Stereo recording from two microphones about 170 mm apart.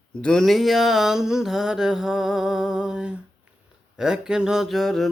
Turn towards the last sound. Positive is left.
turn(degrees=0)  # may be behind; listen again after turning